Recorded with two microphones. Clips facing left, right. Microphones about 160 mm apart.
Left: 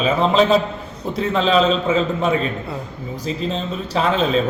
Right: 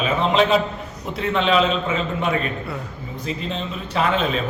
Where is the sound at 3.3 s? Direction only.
35° left (ahead or behind).